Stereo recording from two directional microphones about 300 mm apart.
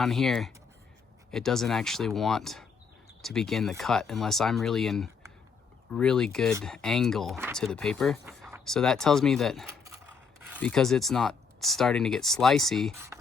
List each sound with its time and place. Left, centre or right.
0.0 s speech: centre